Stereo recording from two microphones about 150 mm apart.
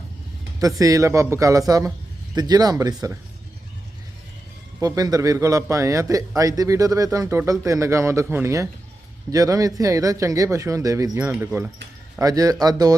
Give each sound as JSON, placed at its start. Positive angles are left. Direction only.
{"t": 0.6, "sound": "a man's voice", "side_deg": -25}
{"t": 4.8, "sound": "a man's voice", "side_deg": -25}